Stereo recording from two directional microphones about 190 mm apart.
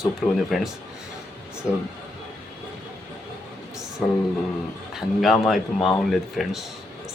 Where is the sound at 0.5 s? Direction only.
Centre (ahead or behind).